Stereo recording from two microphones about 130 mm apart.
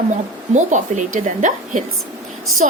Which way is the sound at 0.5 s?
75° right (ahead or behind).